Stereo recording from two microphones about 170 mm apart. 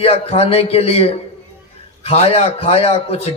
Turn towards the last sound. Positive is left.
turn(degrees=35)  # may be behind; listen again after turning